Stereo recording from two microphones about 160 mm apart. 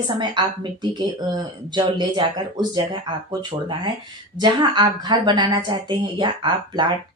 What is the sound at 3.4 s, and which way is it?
A woman's voice, 30° right (ahead or behind).